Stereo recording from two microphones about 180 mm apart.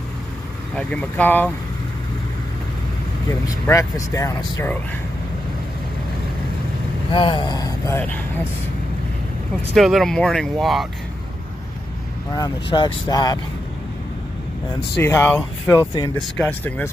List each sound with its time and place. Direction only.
0.7 s speech: 5° left (ahead or behind)
3.3 s speech: 20° left (ahead or behind)
7.1 s speech: 25° left (ahead or behind)
9.8 s speech: centre (ahead or behind)
12.4 s speech: 25° left (ahead or behind)
15.0 s speech: 15° left (ahead or behind)
16.2 s speech: 5° left (ahead or behind)